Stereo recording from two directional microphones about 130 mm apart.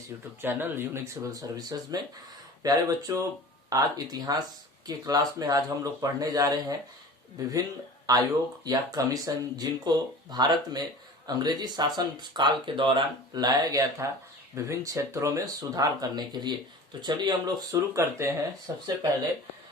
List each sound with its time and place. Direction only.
0.1 s speech: 20° right (ahead or behind)
1.3 s speech: 30° right (ahead or behind)